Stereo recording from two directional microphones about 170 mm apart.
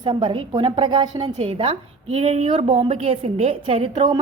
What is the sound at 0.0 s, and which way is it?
A woman's voice, 25° right (ahead or behind).